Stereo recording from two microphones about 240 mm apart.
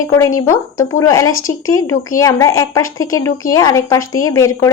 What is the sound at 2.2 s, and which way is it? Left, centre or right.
A woman's voice, centre.